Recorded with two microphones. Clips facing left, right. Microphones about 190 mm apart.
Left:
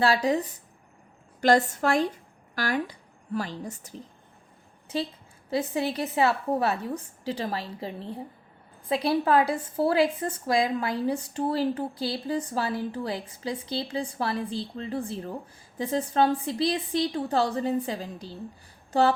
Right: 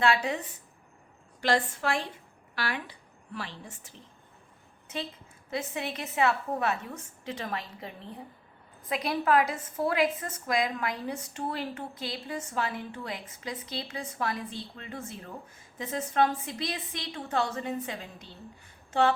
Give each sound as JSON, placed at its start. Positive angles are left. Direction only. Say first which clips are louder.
{"t": 0.0, "sound": "a woman's voice", "louder": "left 4 dB", "side_deg": 35}
{"t": 5.5, "sound": "a woman's voice", "louder": "left 7 dB", "side_deg": 35}